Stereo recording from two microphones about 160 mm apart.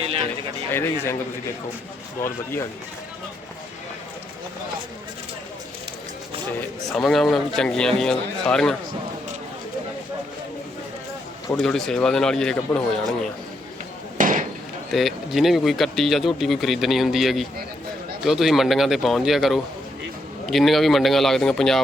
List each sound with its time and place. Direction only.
0.0 s a sound: 40° right (ahead or behind)
0.7 s speech: 15° left (ahead or behind)
2.2 s speech: 15° left (ahead or behind)
6.8 s speech: centre (ahead or behind)
11.6 s speech: 5° left (ahead or behind)
14.2 s chop: 55° right (ahead or behind)
14.9 s speech: centre (ahead or behind)